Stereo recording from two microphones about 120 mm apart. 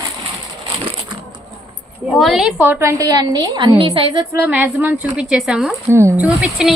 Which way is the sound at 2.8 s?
25° right (ahead or behind).